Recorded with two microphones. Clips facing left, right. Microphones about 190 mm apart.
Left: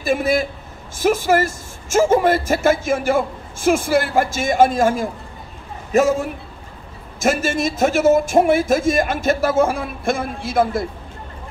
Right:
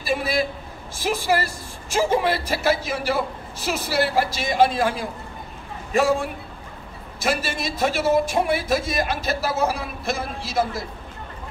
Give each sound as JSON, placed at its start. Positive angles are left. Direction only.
{"t": 0.0, "sound": "a woman's voice", "side_deg": 45}